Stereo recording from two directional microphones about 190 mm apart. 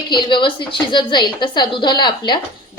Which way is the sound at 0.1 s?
25° left (ahead or behind).